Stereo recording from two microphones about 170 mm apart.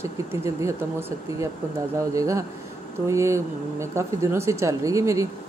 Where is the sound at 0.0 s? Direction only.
15° right (ahead or behind).